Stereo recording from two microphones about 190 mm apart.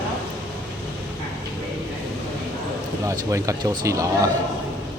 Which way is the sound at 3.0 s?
15° right (ahead or behind).